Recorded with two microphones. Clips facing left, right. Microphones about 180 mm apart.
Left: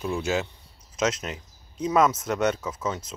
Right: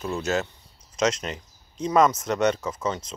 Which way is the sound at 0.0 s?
10° left (ahead or behind).